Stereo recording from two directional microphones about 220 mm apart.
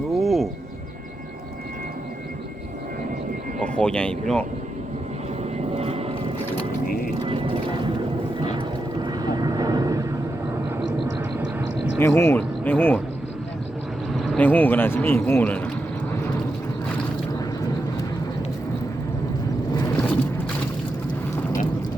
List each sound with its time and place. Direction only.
0.1 s music: centre (ahead or behind)
3.6 s speech: 5° left (ahead or behind)
5.4 s vehicle: 25° right (ahead or behind)
7.3 s a sound: 25° right (ahead or behind)
9.0 s vehicle: 20° right (ahead or behind)
11.9 s speech: 10° left (ahead or behind)
14.2 s speech: 5° left (ahead or behind)